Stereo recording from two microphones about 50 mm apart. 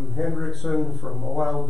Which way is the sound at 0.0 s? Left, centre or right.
Centre.